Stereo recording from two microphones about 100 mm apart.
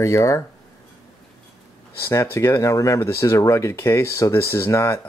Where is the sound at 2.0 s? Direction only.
30° left (ahead or behind).